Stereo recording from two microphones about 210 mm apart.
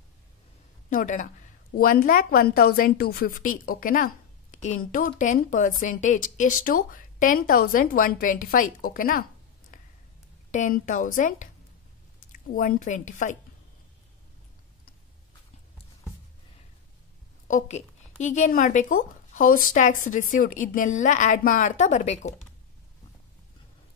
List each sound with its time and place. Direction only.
0.8 s a woman's voice: 35° left (ahead or behind)
10.5 s a woman's voice: 35° left (ahead or behind)
17.5 s a woman's voice: 35° left (ahead or behind)